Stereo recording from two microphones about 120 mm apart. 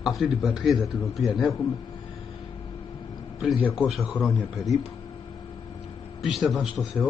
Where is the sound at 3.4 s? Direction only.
5° right (ahead or behind).